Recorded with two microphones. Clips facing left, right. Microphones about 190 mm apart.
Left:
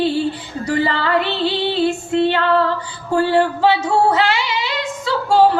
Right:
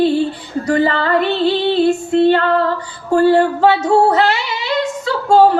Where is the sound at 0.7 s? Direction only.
40° right (ahead or behind).